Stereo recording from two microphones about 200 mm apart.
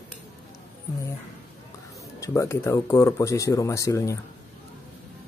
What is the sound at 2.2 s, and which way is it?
Speech, 15° left (ahead or behind).